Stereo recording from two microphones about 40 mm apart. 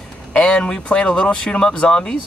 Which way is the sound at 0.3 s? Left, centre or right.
Left.